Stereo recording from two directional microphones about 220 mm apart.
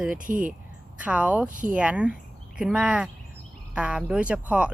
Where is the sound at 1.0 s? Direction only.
5° right (ahead or behind).